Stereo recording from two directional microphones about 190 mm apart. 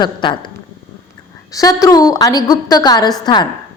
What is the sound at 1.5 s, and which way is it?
A woman's voice, 20° left (ahead or behind).